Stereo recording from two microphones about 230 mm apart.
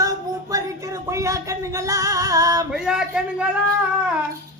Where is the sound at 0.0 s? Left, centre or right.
Centre.